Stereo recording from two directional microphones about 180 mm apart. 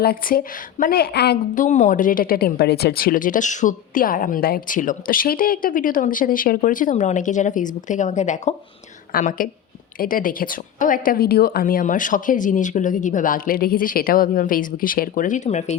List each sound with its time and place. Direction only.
0.0 s a woman's voice: 55° left (ahead or behind)
1.5 s a woman's voice: 45° left (ahead or behind)
9.1 s speech: 50° left (ahead or behind)